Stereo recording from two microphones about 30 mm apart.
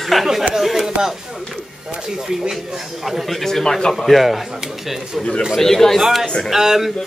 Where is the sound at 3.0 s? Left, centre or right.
Centre.